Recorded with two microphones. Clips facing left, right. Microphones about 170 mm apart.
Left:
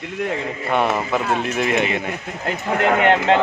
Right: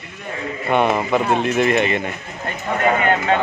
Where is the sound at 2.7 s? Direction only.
75° left (ahead or behind).